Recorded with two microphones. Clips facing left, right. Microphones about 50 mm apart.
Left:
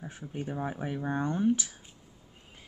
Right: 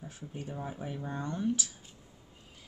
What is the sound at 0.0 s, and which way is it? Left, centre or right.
Speech, left.